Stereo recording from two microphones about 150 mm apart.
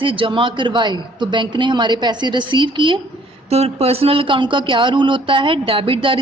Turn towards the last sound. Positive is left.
turn(degrees=-35)  # may be behind; listen again after turning